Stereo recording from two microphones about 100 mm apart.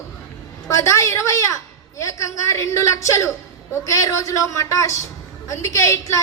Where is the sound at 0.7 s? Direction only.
30° left (ahead or behind).